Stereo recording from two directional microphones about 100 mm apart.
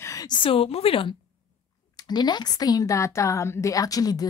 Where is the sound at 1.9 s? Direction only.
45° left (ahead or behind).